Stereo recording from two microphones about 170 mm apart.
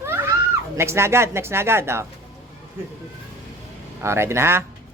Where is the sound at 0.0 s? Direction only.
15° right (ahead or behind).